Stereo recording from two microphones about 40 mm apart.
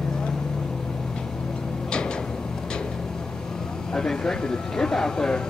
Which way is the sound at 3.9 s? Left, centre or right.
Centre.